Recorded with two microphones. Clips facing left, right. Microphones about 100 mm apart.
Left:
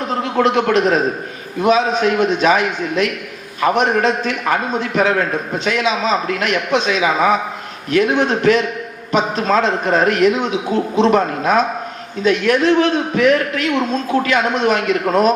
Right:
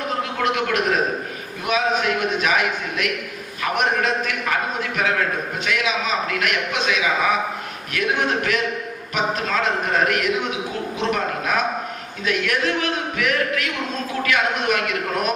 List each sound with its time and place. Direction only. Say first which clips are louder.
0.3 s a man's voice: left 9 dB; 30° left (ahead or behind)